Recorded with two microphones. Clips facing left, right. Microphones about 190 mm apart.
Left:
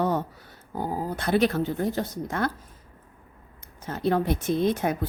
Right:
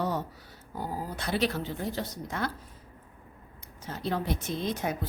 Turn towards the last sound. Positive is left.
turn(degrees=55)  # may be behind; listen again after turning